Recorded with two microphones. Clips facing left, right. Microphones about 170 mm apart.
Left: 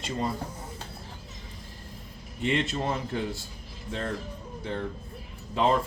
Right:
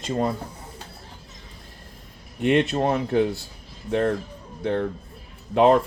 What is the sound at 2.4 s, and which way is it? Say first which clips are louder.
A man's voice: right 8 dB; 60° right (ahead or behind).